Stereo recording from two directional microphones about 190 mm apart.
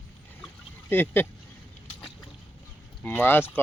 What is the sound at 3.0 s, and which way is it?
Speech, 10° left (ahead or behind).